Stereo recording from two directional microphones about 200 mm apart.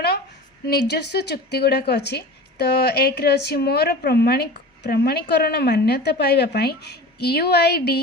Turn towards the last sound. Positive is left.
turn(degrees=55)  # may be behind; listen again after turning